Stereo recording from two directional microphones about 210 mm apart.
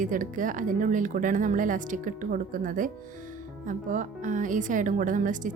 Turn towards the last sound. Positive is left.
turn(degrees=-40)  # may be behind; listen again after turning